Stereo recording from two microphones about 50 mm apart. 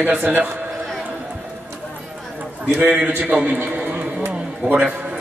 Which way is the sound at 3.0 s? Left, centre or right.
Right.